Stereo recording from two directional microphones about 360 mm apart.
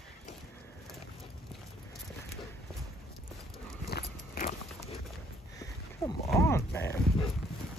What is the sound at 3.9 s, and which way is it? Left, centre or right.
Walk, left.